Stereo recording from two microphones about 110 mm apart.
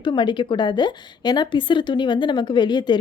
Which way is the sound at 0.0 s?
45° left (ahead or behind).